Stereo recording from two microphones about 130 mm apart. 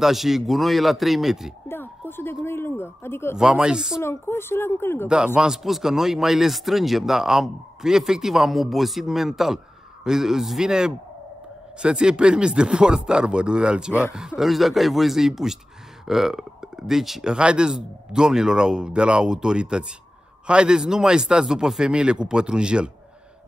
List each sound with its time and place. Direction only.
0.0 s speech: centre (ahead or behind)
1.7 s oink: 15° left (ahead or behind)
2.4 s a sound: 20° left (ahead or behind)
3.3 s speech: 5° right (ahead or behind)
4.0 s a woman's voice: 20° left (ahead or behind)
5.0 s speech: 5° right (ahead or behind)